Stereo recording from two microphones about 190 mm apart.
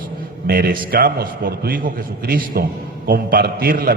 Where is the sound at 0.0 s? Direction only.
50° right (ahead or behind).